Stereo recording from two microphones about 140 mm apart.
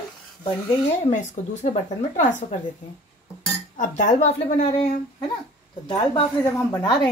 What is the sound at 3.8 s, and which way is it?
A woman's voice, 60° left (ahead or behind).